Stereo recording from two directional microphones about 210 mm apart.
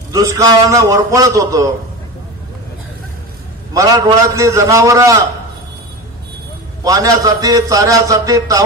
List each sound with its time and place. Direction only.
0.1 s a man's voice: 15° right (ahead or behind)
3.7 s a man's voice: 15° right (ahead or behind)
6.8 s a man's voice: 15° right (ahead or behind)